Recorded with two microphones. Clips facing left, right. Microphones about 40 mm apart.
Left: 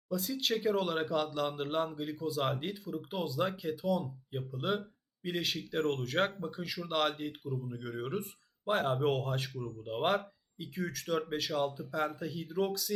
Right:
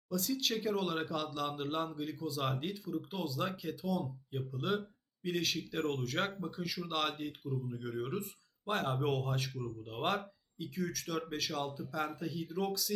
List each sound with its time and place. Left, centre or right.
0.1 s speech: centre